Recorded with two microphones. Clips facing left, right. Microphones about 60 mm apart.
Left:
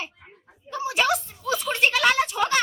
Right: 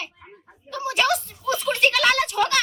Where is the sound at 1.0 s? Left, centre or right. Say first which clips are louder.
Right 1 dB; centre.